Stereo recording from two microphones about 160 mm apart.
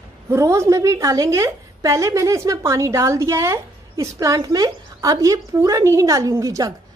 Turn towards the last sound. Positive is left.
turn(degrees=-20)  # may be behind; listen again after turning